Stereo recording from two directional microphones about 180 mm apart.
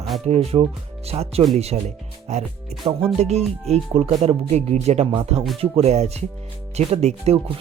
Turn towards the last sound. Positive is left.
turn(degrees=-35)  # may be behind; listen again after turning